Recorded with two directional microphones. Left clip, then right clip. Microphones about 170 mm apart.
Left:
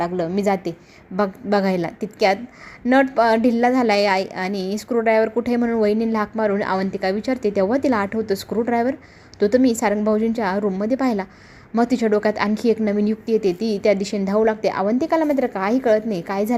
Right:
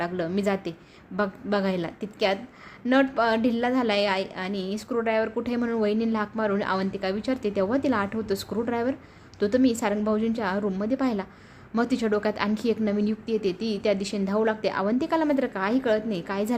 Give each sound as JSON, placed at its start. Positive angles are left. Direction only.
{"t": 0.0, "sound": "a woman's voice", "side_deg": 15}